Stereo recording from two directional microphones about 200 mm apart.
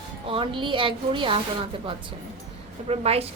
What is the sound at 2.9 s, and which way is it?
Speech, 30° right (ahead or behind).